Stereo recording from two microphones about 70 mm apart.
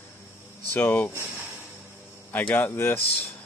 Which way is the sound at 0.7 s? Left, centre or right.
Left.